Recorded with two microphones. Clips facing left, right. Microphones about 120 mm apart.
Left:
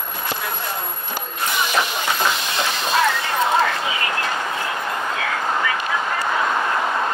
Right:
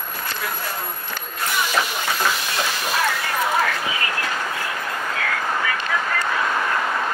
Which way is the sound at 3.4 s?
25° left (ahead or behind).